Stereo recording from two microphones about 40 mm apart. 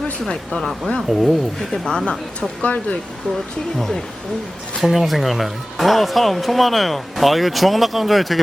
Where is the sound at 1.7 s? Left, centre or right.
Centre.